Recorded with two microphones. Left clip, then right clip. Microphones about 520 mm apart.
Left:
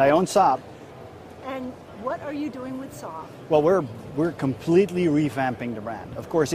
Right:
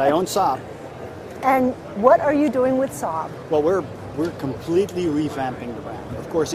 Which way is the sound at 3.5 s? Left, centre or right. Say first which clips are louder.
Even; left.